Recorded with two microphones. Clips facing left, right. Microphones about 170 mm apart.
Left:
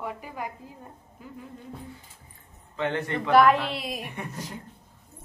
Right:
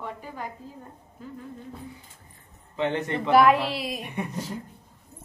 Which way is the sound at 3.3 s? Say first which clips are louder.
Right 1 dB; 5° right (ahead or behind).